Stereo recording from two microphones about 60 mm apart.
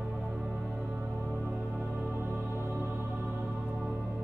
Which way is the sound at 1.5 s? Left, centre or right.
Centre.